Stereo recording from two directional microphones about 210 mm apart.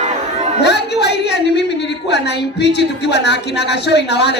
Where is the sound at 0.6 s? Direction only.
55° left (ahead or behind).